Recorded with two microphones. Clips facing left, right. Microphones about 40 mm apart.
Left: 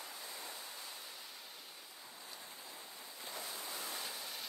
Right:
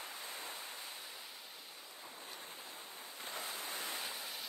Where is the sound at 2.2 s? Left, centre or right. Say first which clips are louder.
Right 1 dB; right.